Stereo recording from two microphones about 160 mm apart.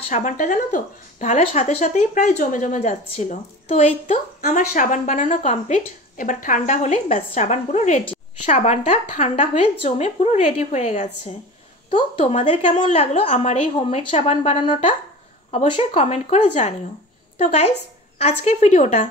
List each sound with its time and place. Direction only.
0.1 s a woman's voice: 55° left (ahead or behind)
4.5 s a woman's voice: 55° left (ahead or behind)